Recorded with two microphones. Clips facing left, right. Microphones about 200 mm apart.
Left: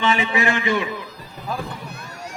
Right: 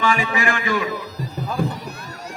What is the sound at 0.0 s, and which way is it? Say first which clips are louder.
Speech: even; 20° left (ahead or behind).